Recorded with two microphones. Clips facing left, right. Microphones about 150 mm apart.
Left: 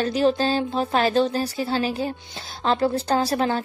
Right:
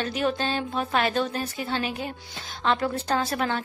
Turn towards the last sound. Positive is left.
turn(degrees=35)  # may be behind; listen again after turning